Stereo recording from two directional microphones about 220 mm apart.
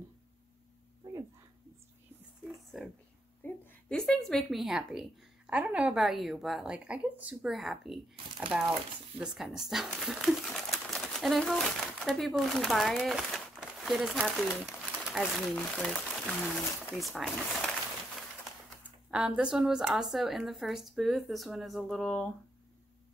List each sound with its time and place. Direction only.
2.4 s a sound: centre (ahead or behind)
3.4 s a woman's voice: 5° left (ahead or behind)
19.0 s speech: 5° right (ahead or behind)